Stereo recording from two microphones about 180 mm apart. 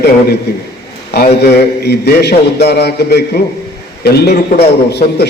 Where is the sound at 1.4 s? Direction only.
65° left (ahead or behind).